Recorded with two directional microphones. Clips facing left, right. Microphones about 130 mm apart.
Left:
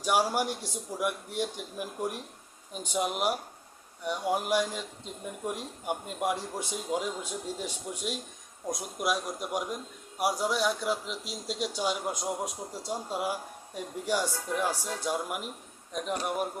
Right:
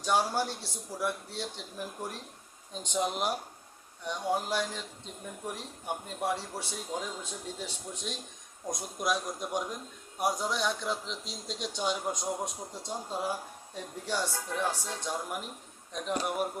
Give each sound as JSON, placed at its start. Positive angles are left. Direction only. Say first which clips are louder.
{"t": 0.0, "sound": "speech", "louder": "left 2 dB", "side_deg": 10}